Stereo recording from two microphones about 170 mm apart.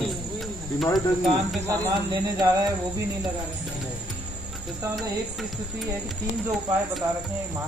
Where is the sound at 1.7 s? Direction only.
20° right (ahead or behind).